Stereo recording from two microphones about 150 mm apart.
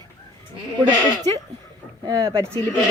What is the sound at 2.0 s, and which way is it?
Speech, 20° right (ahead or behind).